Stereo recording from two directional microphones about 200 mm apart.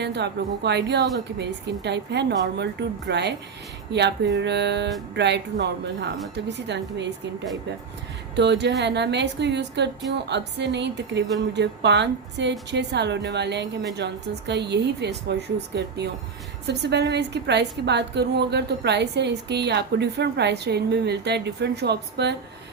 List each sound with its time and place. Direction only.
0.0 s a woman's voice: 60° right (ahead or behind)
8.4 s a woman's voice: 60° right (ahead or behind)